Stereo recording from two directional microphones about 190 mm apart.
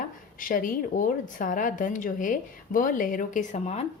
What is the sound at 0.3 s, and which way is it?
A woman's voice, 45° left (ahead or behind).